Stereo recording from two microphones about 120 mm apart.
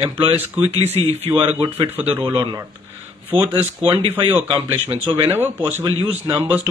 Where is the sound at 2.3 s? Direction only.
40° right (ahead or behind).